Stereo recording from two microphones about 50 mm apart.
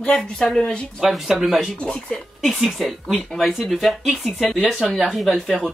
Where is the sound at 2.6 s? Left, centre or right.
Centre.